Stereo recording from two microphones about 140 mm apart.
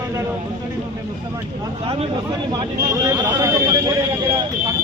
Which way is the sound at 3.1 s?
25° right (ahead or behind).